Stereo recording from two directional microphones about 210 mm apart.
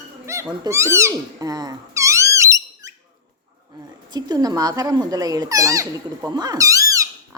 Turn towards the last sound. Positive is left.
turn(degrees=-15)  # may be behind; listen again after turning